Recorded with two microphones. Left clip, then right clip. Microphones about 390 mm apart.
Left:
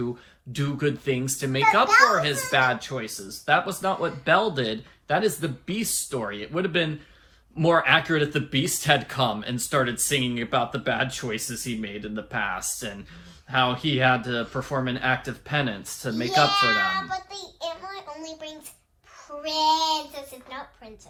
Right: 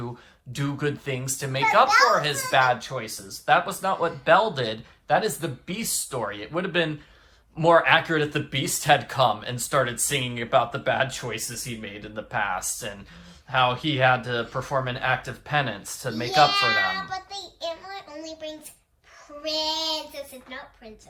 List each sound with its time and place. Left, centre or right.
0.5 s a child's voice: centre
16.5 s child singing: centre
19.4 s a child's voice: centre